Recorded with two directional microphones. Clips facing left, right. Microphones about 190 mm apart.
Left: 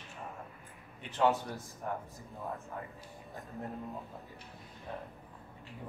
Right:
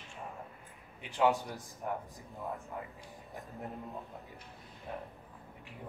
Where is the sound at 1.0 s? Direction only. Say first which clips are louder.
Even; 10° right (ahead or behind).